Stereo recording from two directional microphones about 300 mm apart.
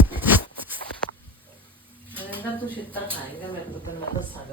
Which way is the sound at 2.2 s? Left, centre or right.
Centre.